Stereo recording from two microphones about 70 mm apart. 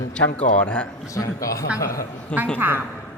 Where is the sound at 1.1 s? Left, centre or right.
Left.